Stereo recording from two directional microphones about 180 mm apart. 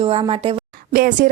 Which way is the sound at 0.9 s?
50° right (ahead or behind).